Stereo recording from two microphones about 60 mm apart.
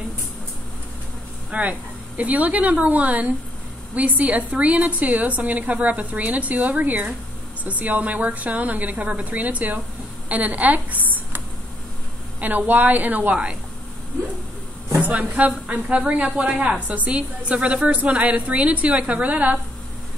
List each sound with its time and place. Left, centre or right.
1.5 s speech: right
10.2 s a sound: right
12.4 s speech: right
15.0 s speech: right